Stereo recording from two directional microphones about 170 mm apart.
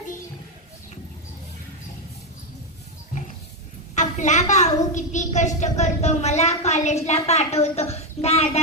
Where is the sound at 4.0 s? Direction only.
45° left (ahead or behind).